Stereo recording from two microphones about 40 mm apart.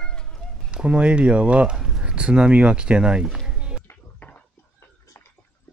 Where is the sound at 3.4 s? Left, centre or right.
Right.